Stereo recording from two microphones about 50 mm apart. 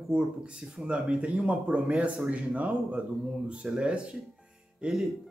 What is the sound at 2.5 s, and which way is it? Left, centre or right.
Speech, right.